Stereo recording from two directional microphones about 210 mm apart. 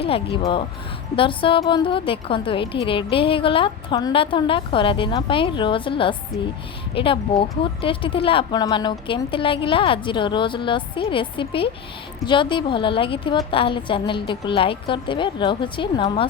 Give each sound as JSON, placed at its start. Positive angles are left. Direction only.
{"t": 0.0, "sound": "a woman's voice", "side_deg": 25}